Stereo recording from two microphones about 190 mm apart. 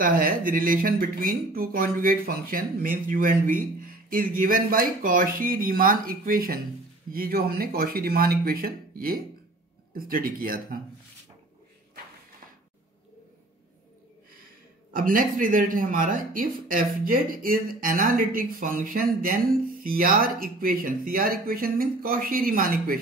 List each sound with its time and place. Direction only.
0.0 s speech: 50° right (ahead or behind)
14.9 s speech: 45° right (ahead or behind)